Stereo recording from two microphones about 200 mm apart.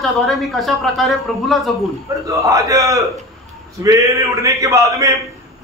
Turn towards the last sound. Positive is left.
turn(degrees=-15)  # may be behind; listen again after turning